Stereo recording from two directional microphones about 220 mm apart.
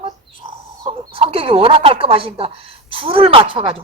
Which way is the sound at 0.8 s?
25° right (ahead or behind).